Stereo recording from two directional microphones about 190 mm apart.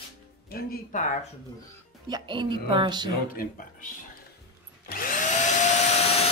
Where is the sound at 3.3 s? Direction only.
50° left (ahead or behind).